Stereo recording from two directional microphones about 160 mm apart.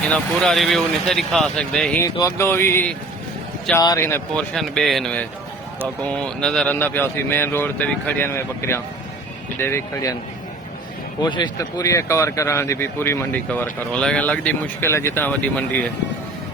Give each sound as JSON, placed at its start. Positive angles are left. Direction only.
{"t": 0.1, "sound": "speech", "side_deg": 0}
{"t": 2.0, "sound": "speech", "side_deg": 15}
{"t": 4.5, "sound": "speech", "side_deg": 0}
{"t": 11.2, "sound": "speech", "side_deg": 30}